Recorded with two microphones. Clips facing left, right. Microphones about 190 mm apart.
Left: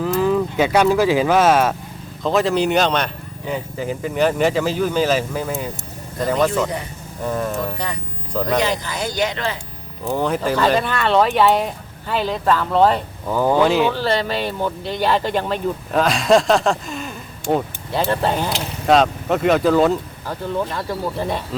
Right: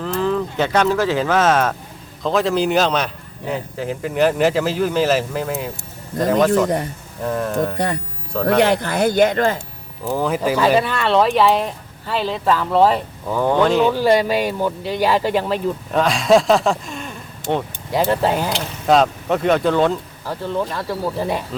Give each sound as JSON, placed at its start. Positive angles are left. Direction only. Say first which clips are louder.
{"t": 0.0, "sound": "speech", "louder": "left 2 dB", "side_deg": 10}
{"t": 8.4, "sound": "speech", "louder": "right 6 dB", "side_deg": -60}
{"t": 10.0, "sound": "speech", "louder": "right 1 dB", "side_deg": -5}
{"t": 13.9, "sound": "speech", "louder": "right 5 dB", "side_deg": -10}